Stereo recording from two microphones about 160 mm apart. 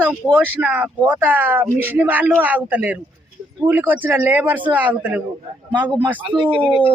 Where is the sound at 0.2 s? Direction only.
5° right (ahead or behind).